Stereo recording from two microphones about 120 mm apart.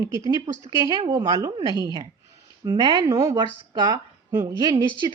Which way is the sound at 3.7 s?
35° right (ahead or behind).